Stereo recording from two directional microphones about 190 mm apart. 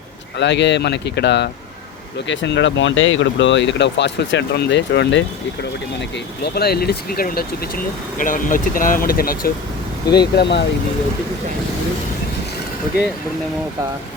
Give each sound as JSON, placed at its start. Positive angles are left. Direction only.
{"t": 0.3, "sound": "speech", "side_deg": 65}
{"t": 10.3, "sound": "speech", "side_deg": 65}